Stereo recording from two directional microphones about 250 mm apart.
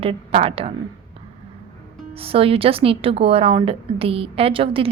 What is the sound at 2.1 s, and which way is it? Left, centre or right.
A woman's voice, right.